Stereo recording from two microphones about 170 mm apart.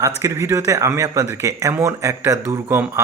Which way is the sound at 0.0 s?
20° right (ahead or behind).